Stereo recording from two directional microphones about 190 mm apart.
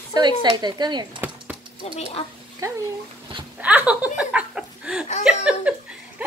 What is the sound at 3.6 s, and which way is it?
Speech, 5° right (ahead or behind).